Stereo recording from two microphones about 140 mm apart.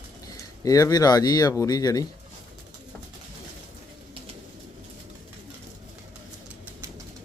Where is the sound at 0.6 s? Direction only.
25° left (ahead or behind).